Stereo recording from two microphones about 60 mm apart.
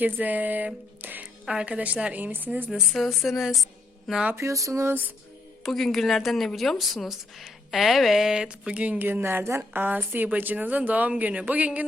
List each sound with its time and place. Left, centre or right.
0.0 s a woman's voice: right
1.5 s a woman's voice: centre
2.9 s speech: centre
4.4 s a sound: right
5.6 s speech: centre; by 9.0 s right
9.0 s a woman's voice: right